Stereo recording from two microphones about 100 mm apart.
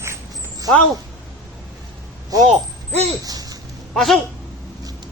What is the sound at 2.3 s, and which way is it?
Speech, 35° right (ahead or behind).